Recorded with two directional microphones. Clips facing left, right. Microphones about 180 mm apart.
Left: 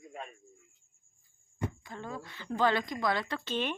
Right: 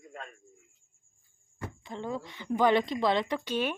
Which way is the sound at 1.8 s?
20° right (ahead or behind).